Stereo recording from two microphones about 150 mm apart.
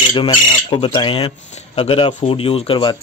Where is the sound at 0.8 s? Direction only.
35° left (ahead or behind).